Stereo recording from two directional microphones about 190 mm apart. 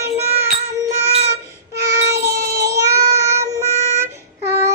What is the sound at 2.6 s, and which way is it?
Child singing, 15° right (ahead or behind).